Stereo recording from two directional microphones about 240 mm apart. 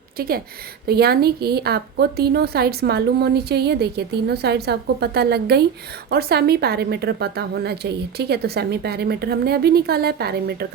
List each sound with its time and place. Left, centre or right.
0.2 s a woman's voice: right